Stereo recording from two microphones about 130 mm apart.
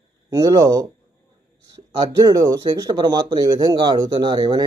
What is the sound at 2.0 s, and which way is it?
Speech, 30° right (ahead or behind).